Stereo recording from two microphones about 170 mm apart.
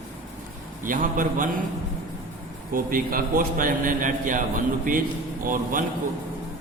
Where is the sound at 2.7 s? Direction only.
55° right (ahead or behind).